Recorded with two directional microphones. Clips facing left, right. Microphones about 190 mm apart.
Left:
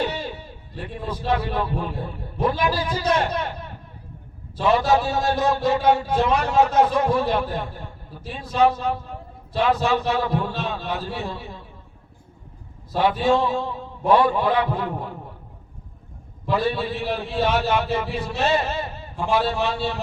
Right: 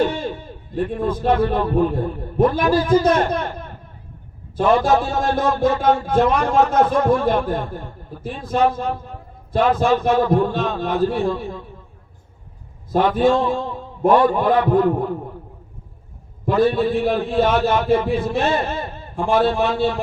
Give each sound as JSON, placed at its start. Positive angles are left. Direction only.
{"t": 0.0, "sound": "speech", "side_deg": -50}
{"t": 4.5, "sound": "a man's voice", "side_deg": -50}
{"t": 12.9, "sound": "a man's voice", "side_deg": -50}
{"t": 16.5, "sound": "a man's voice", "side_deg": -45}